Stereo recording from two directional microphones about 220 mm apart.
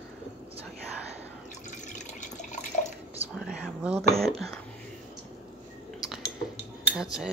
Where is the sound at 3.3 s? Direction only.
Centre (ahead or behind).